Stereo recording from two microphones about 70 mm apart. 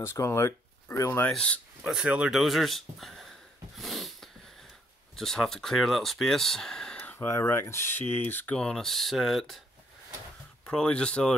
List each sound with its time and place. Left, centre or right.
0.0 s speech: left
1.3 s speech: centre
1.8 s speech: centre
2.3 s speech: centre
3.7 s a sound: centre
5.1 s speech: centre
7.2 s speech: left
8.5 s speech: centre
10.6 s speech: centre